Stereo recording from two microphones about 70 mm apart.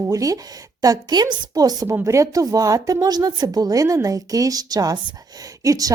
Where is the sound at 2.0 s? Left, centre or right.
Right.